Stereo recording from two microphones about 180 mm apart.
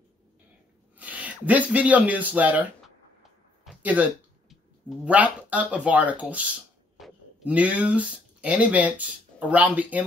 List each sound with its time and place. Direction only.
0.9 s speech: 10° right (ahead or behind)
3.2 s a sound: 5° right (ahead or behind)
7.0 s speech: 5° right (ahead or behind)